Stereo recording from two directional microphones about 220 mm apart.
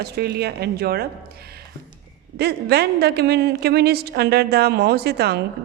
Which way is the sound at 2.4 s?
45° right (ahead or behind).